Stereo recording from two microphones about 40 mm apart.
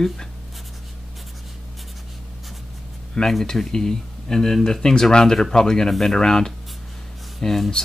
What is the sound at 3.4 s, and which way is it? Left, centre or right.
Speech, centre.